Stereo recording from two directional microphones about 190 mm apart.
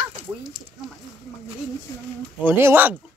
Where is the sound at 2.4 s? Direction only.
10° right (ahead or behind).